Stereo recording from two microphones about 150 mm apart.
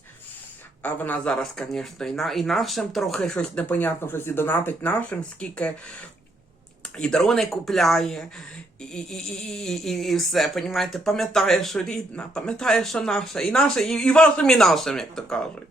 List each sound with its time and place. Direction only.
0.8 s speech: 10° left (ahead or behind)